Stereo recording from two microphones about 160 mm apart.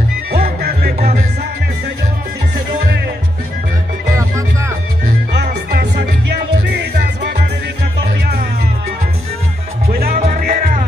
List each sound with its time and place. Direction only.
0.3 s music: 85° right
5.0 s music: 80° right
10.2 s music: 55° right (ahead or behind)